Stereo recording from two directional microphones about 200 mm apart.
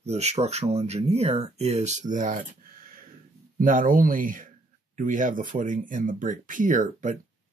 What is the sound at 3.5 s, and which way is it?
Speech, 40° right (ahead or behind).